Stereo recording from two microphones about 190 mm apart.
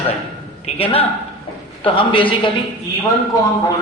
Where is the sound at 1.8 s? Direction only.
25° left (ahead or behind).